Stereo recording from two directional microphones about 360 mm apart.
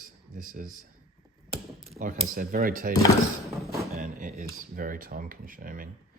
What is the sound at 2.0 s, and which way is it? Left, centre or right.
Speech, right.